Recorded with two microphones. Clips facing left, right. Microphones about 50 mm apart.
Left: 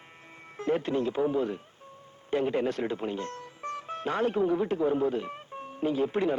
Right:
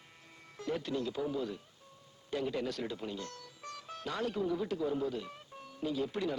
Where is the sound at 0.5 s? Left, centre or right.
Left.